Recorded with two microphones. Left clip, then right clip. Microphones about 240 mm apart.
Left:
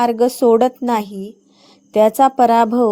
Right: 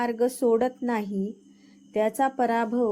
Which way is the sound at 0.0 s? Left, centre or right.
Left.